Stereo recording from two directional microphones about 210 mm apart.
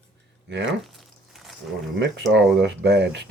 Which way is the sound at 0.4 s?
55° right (ahead or behind).